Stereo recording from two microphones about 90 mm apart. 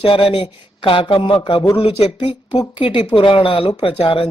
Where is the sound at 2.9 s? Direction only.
65° left (ahead or behind); by 4.2 s 85° left.